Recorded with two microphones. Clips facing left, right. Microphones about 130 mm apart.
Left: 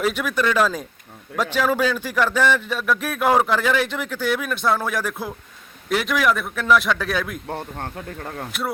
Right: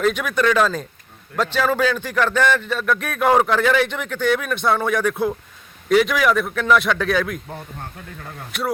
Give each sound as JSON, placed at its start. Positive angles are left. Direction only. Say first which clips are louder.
{"t": 0.0, "sound": "a man's voice", "louder": "right 3 dB", "side_deg": 5}
{"t": 7.5, "sound": "speech", "louder": "left 4 dB", "side_deg": 65}